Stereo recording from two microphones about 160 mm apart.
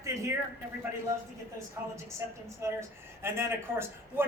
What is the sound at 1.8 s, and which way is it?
A man's voice, 15° right (ahead or behind).